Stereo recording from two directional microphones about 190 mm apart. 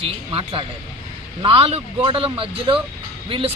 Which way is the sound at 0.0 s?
30° right (ahead or behind).